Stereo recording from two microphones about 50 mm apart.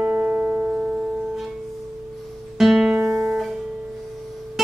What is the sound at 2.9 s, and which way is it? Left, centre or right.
Music, centre.